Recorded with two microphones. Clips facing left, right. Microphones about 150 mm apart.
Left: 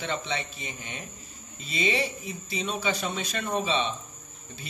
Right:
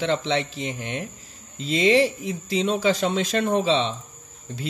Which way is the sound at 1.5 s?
85° right.